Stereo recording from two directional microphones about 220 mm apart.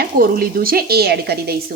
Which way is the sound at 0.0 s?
40° right (ahead or behind).